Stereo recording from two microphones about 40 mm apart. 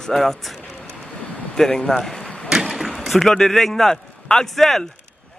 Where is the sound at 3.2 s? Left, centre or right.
Centre.